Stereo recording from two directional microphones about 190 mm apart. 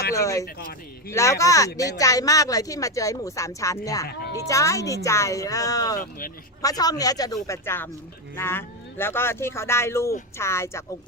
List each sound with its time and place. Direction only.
0.1 s speech: 15° left (ahead or behind)